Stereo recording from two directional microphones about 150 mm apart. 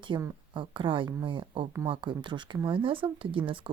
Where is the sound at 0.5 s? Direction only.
35° right (ahead or behind).